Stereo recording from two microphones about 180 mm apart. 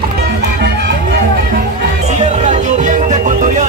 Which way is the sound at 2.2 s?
40° right (ahead or behind).